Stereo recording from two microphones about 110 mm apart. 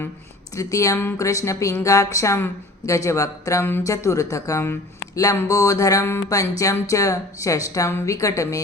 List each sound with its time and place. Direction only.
0.5 s a woman's voice: 30° left (ahead or behind)